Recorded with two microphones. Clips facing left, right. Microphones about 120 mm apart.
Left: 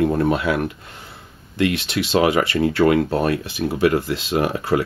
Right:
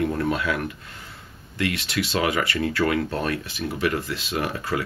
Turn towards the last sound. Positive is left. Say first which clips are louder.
# left 7 dB
turn(degrees=25)  # may be behind; listen again after turning